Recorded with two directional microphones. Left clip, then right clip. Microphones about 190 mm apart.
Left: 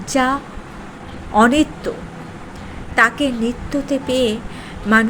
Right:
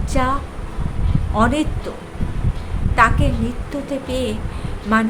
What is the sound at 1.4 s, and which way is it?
Speech, 20° left (ahead or behind).